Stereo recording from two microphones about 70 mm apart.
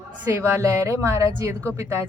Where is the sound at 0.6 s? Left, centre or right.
Right.